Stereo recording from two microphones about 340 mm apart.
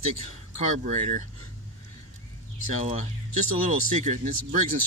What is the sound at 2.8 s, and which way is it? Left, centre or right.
Speech, centre.